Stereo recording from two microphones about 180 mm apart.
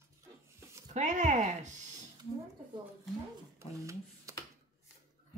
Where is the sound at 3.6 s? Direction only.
15° right (ahead or behind).